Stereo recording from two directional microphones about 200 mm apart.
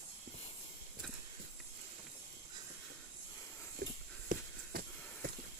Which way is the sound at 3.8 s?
50° right (ahead or behind).